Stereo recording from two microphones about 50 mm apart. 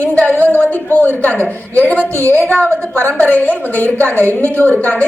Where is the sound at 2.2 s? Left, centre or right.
Right.